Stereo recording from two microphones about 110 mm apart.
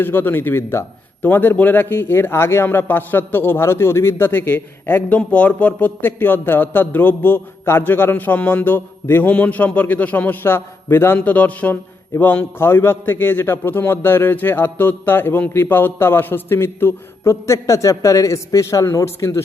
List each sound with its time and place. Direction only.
0.0 s a man's voice: 20° left (ahead or behind)